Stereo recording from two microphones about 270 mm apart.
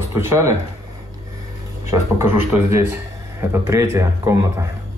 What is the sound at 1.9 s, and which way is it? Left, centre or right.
Speech, centre.